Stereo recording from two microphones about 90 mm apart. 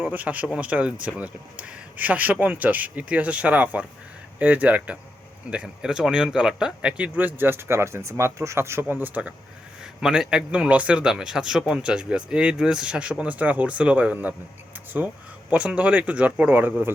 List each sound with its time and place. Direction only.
0.0 s a man's voice: 20° right (ahead or behind)
9.8 s a man's voice: 5° right (ahead or behind)